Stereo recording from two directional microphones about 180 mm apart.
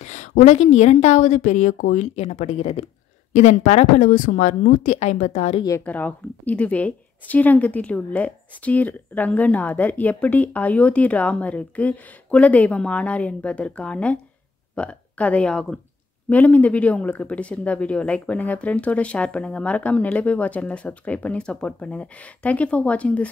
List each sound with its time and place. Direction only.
0.0 s a sound: 40° left (ahead or behind)
0.4 s a woman's voice: 40° left (ahead or behind)
5.9 s speech: 10° left (ahead or behind)